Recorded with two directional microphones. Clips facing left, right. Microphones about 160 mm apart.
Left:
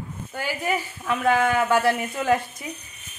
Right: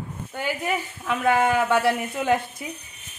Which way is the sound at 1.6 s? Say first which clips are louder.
Even; centre (ahead or behind).